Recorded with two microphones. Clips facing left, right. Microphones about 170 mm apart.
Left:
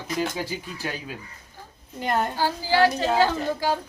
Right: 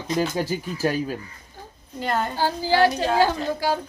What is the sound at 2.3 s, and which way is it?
A woman's voice, 15° right (ahead or behind).